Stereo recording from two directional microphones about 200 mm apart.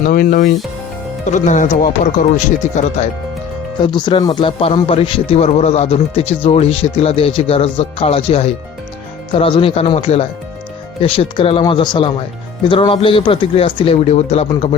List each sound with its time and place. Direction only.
0.1 s speech: 45° left (ahead or behind)
3.9 s speech: 20° left (ahead or behind)